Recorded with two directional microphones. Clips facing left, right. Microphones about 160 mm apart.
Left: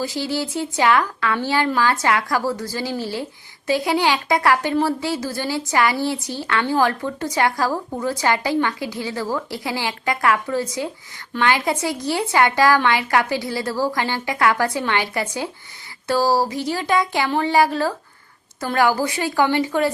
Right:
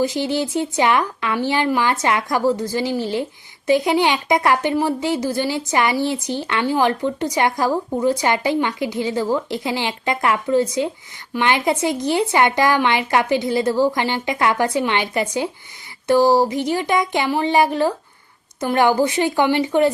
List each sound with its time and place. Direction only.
0.0 s speech: 20° right (ahead or behind)